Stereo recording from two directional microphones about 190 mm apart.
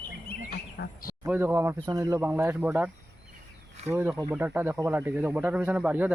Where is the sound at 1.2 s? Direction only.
10° right (ahead or behind).